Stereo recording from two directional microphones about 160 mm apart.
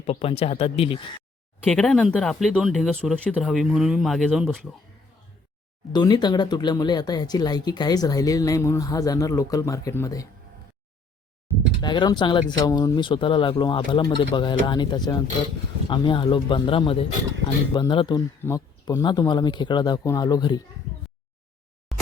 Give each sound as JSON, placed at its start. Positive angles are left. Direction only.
{"t": 0.0, "sound": "speech", "side_deg": 40}
{"t": 1.6, "sound": "speech", "side_deg": 5}
{"t": 5.9, "sound": "speech", "side_deg": 25}
{"t": 11.8, "sound": "speech", "side_deg": 25}